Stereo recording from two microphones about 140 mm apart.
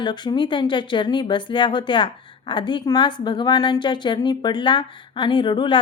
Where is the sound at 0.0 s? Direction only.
30° left (ahead or behind).